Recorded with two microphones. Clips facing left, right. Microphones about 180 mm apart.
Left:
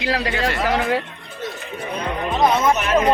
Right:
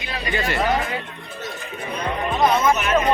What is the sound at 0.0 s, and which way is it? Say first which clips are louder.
Speech: left 4 dB; 85° left.